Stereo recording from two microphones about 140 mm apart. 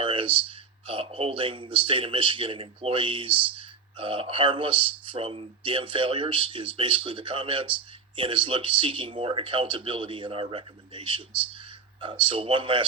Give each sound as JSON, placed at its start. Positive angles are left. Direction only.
{"t": 0.0, "sound": "speech", "side_deg": -40}
{"t": 11.5, "sound": "a sound", "side_deg": -35}
{"t": 12.2, "sound": "speech", "side_deg": -40}